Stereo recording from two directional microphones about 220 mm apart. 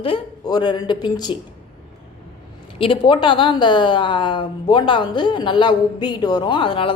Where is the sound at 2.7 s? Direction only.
25° left (ahead or behind).